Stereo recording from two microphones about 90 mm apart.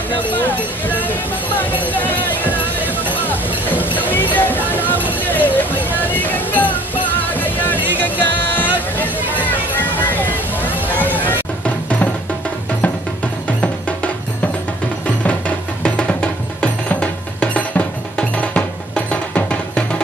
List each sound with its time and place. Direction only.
0.3 s a sound: 20° left (ahead or behind)
1.9 s speech: 20° left (ahead or behind)
3.6 s music: 20° left (ahead or behind)
13.6 s music: 15° left (ahead or behind)